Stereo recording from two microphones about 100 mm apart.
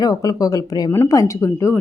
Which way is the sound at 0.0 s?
40° left (ahead or behind).